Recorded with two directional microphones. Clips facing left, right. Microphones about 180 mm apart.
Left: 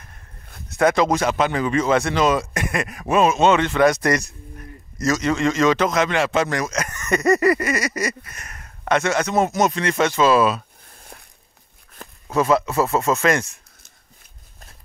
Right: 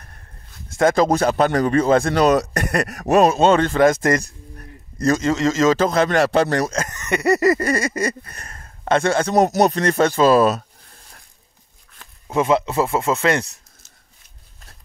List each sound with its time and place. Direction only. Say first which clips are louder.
0.9 s speech: right 2 dB; 35° right (ahead or behind)
6.9 s a sound: left 1 dB; 20° right (ahead or behind)
7.2 s speech: right 1 dB; 30° right (ahead or behind)
12.3 s speech: even; 25° right (ahead or behind)